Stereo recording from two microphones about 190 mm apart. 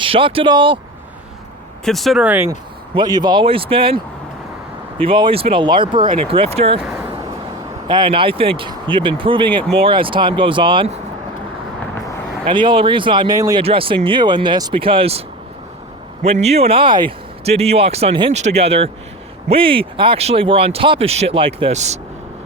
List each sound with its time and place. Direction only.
0.0 s speech: 25° right (ahead or behind)
1.8 s speech: centre (ahead or behind)
2.5 s speech: 20° right (ahead or behind)
7.9 s speech: 25° right (ahead or behind)
12.5 s speech: 25° right (ahead or behind)
16.2 s speech: 35° right (ahead or behind)